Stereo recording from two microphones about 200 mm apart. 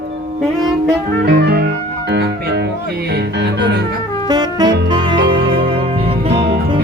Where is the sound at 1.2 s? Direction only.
55° right (ahead or behind).